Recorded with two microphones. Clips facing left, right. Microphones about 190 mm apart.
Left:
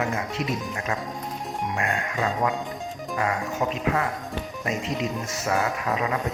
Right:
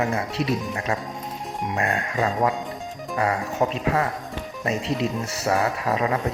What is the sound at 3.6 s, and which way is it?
Speech, 40° right (ahead or behind).